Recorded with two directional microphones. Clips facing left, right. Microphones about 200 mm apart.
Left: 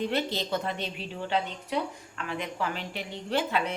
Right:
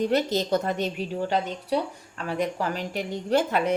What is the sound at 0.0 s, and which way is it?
A woman's voice, 40° right (ahead or behind).